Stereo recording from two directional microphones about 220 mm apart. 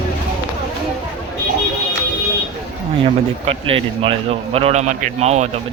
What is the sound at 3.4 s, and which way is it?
Speech, 25° right (ahead or behind).